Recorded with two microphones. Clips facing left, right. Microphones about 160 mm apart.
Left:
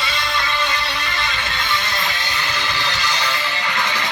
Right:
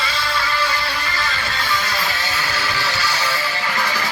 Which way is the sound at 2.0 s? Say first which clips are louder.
Right 1 dB; 5° right (ahead or behind).